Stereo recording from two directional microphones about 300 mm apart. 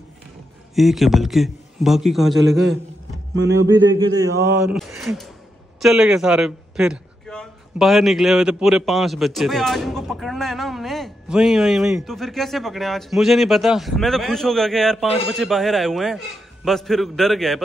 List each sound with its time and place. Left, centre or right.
0.7 s a man's voice: centre
3.3 s speech: right
4.4 s a man's voice: centre